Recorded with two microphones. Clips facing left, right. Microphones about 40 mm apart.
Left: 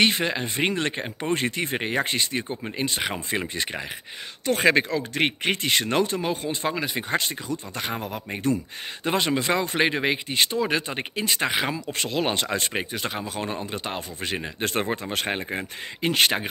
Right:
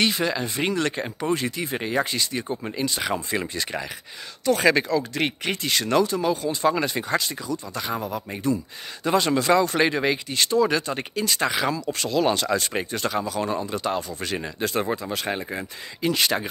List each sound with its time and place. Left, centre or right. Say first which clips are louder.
0.0 s speech: left 1 dB; left
6.7 s speech: right 4 dB; centre
7.0 s speech: right 1 dB; left
14.6 s speech: right 1 dB; left